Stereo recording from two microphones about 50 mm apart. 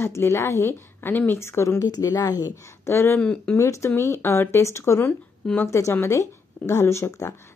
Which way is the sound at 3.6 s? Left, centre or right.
Left.